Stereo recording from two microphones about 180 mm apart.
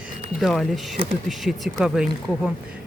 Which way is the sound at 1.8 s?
5° right (ahead or behind).